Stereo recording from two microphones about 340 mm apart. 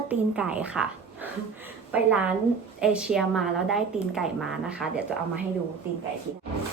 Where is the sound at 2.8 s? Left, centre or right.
Centre.